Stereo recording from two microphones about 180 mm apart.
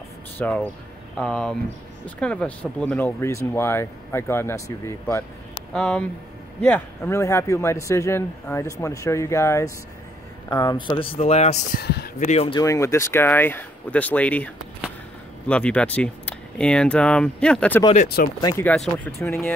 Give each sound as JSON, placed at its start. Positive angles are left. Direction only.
{"t": 0.4, "sound": "a man's voice", "side_deg": 5}
{"t": 5.7, "sound": "a man's voice", "side_deg": 5}
{"t": 11.8, "sound": "speech", "side_deg": 60}
{"t": 12.3, "sound": "speech", "side_deg": 35}
{"t": 12.5, "sound": "a man's voice", "side_deg": 15}
{"t": 18.0, "sound": "speech", "side_deg": 60}
{"t": 18.4, "sound": "a man's voice", "side_deg": 15}